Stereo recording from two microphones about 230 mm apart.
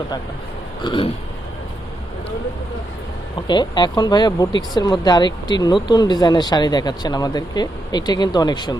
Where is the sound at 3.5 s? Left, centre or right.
Centre.